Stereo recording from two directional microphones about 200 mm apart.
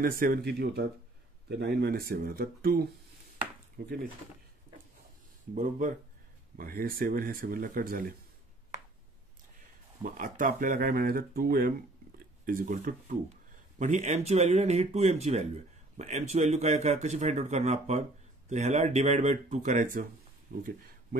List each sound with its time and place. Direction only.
0.0 s speech: 45° right (ahead or behind)
5.5 s speech: 40° right (ahead or behind)
10.0 s speech: 40° right (ahead or behind)